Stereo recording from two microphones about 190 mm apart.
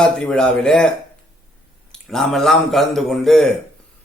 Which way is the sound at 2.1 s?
Centre (ahead or behind).